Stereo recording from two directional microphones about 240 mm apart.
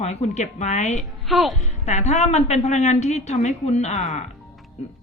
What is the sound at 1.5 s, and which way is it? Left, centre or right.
A woman's voice, left.